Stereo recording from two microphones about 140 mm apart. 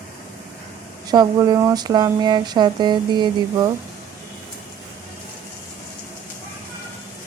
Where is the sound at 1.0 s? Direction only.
30° right (ahead or behind).